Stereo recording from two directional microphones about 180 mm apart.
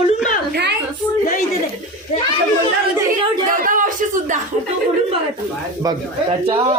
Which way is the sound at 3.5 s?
50° right (ahead or behind).